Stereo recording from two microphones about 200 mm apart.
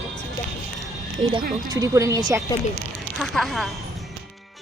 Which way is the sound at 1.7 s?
15° right (ahead or behind).